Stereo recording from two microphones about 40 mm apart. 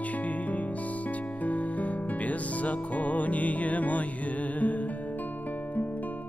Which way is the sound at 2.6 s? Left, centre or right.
Left.